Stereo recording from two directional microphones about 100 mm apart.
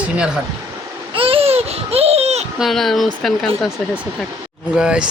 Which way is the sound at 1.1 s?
65° right (ahead or behind).